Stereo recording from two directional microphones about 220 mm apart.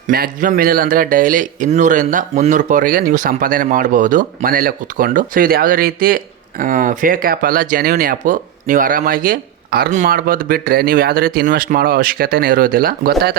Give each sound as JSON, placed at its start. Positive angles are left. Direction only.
{"t": 0.1, "sound": "a man's voice", "side_deg": -40}